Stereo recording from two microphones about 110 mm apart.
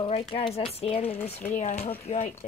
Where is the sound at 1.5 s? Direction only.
90° left.